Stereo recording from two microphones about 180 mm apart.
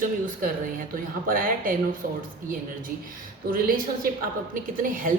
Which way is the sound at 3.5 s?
50° right (ahead or behind).